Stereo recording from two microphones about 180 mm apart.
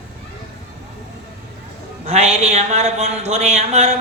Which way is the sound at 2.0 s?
35° right (ahead or behind).